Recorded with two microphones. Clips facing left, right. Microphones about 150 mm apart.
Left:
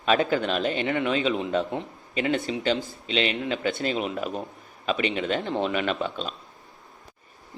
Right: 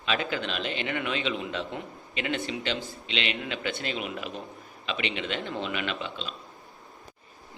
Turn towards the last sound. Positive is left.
turn(degrees=45)  # may be behind; listen again after turning